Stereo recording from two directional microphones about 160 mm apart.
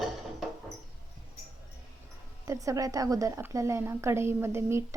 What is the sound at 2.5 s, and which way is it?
A woman's voice, 20° right (ahead or behind).